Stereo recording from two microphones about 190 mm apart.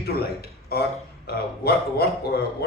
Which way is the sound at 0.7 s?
55° left (ahead or behind).